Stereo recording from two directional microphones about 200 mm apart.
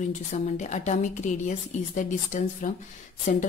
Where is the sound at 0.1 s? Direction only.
35° left (ahead or behind).